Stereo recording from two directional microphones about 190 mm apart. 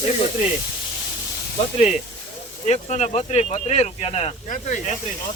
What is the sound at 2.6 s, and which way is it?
Speech, 35° left (ahead or behind).